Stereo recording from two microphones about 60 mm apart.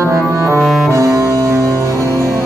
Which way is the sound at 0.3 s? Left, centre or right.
Right.